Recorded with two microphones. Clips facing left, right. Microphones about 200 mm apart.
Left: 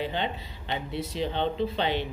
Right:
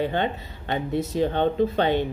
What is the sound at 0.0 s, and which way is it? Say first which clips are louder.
Speech: right 6 dB; 50° right (ahead or behind).